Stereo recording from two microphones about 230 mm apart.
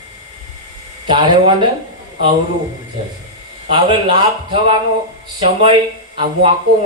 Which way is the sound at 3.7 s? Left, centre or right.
Right.